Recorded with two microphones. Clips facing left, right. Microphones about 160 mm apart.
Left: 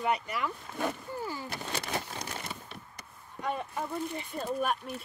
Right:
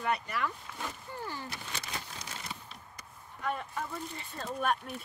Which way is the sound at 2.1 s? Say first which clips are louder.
Left 4 dB; 60° left (ahead or behind).